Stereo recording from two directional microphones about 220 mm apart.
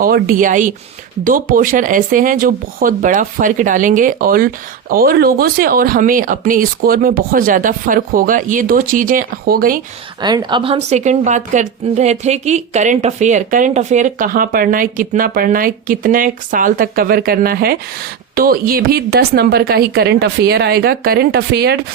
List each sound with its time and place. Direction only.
0.0 s a woman's voice: 40° right (ahead or behind)
10.2 s a woman's voice: 20° right (ahead or behind); by 21.8 s 45° right (ahead or behind)